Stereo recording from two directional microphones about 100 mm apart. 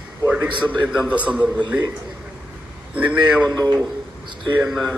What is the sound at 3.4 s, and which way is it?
Speech, 40° right (ahead or behind).